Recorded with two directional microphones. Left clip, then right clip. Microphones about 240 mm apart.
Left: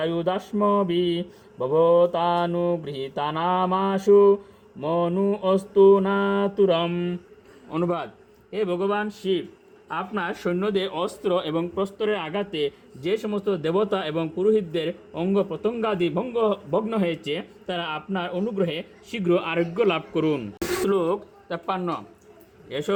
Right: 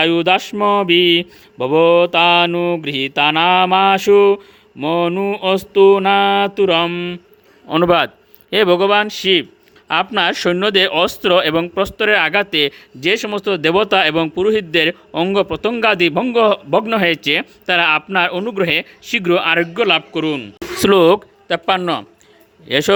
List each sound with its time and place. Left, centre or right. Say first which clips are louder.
0.0 s a man's voice: right 11 dB; right; by 7.2 s centre
8.5 s speech: right 12 dB; right
11.2 s a man's voice: right 9 dB; right
13.9 s a man's voice: right 13 dB; right
14.2 s a man's voice: right 6 dB; right; by 20.4 s centre
20.9 s speech: right 13 dB; right
21.5 s a man's voice: right 11 dB; right